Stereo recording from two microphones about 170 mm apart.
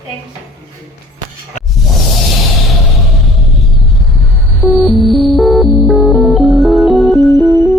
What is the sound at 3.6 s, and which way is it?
Music, centre (ahead or behind).